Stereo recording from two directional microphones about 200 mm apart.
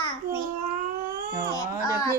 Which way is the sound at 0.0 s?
25° left (ahead or behind).